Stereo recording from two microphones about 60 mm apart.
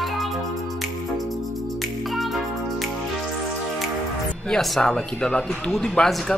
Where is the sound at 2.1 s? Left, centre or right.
Centre.